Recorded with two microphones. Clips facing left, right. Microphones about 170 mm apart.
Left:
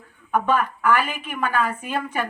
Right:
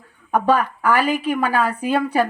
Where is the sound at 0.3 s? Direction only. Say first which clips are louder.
Right 3 dB; 35° right (ahead or behind).